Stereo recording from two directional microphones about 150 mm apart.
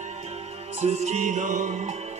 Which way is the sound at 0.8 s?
50° right (ahead or behind).